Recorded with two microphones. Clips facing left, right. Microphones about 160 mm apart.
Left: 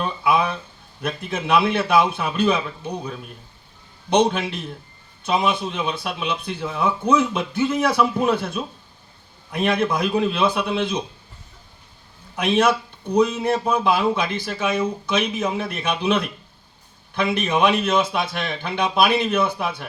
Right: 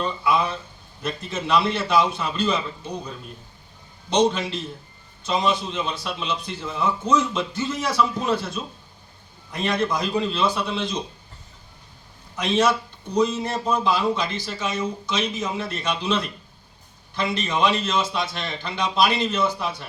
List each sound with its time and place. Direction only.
0.0 s a sound: 60° left (ahead or behind)
1.0 s a man's voice: 60° left (ahead or behind)
4.1 s a man's voice: 55° left (ahead or behind)
12.4 s a man's voice: 60° left (ahead or behind)